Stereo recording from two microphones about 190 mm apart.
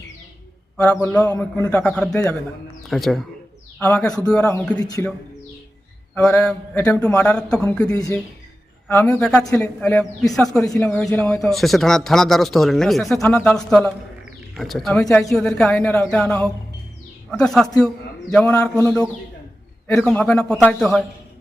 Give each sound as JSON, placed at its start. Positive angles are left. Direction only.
{"t": 0.9, "sound": "a man's voice", "side_deg": 10}
{"t": 4.8, "sound": "speech", "side_deg": 20}
{"t": 6.1, "sound": "a man's voice", "side_deg": 10}